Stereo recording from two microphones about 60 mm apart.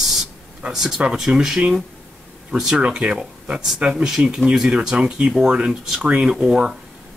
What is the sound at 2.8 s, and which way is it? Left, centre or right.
Speech, centre.